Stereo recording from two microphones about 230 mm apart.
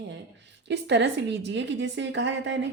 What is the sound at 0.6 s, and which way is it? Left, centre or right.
Speech, right.